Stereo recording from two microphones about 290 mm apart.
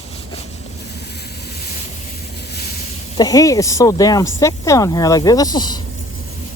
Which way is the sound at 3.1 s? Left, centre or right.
Centre.